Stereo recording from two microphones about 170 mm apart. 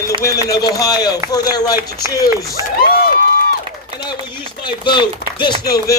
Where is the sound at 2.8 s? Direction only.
60° left (ahead or behind).